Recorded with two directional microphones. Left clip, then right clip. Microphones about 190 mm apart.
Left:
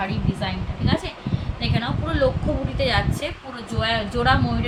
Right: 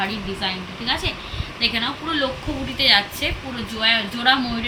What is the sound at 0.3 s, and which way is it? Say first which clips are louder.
Speech: right 3 dB; 55° left (ahead or behind).